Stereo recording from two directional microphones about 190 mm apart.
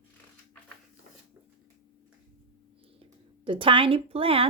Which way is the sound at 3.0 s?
25° right (ahead or behind).